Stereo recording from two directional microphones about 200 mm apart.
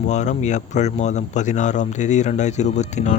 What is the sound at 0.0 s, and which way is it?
Speech, 35° left (ahead or behind).